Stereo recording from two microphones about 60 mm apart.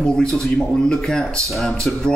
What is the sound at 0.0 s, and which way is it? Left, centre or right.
Speech, centre.